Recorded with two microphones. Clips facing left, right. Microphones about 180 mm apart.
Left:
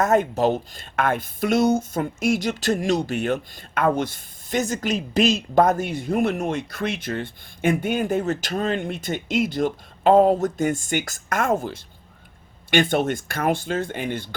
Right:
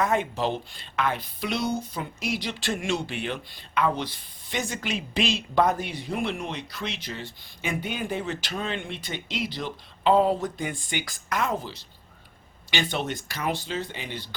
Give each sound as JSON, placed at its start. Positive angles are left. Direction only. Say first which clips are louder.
{"t": 0.0, "sound": "speech", "louder": "left 6 dB", "side_deg": 45}